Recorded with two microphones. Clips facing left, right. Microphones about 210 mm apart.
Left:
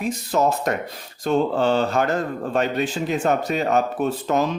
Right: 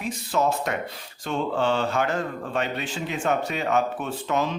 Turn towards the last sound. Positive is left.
turn(degrees=40)  # may be behind; listen again after turning